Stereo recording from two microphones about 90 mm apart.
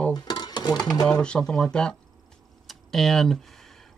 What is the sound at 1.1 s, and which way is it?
Speech, 10° left (ahead or behind).